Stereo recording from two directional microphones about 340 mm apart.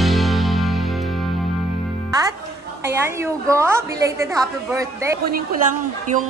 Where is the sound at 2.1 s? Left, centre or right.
Centre.